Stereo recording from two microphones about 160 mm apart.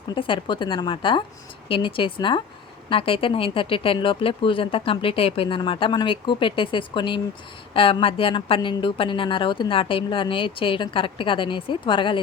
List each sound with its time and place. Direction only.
0.1 s speech: 30° left (ahead or behind)